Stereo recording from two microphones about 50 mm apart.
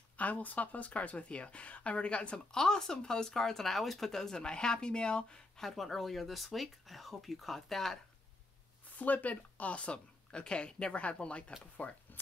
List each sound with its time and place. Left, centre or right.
0.2 s speech: left
5.6 s speech: centre
8.9 s speech: left